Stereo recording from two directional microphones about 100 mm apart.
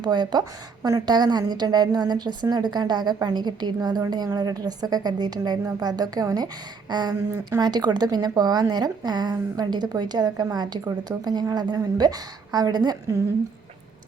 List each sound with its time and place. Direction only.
0.0 s a woman's voice: 45° right (ahead or behind)